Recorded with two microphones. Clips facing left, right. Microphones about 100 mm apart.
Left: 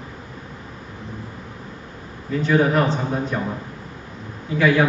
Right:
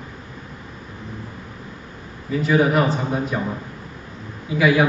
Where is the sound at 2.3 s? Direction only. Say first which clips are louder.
Even; 5° right (ahead or behind).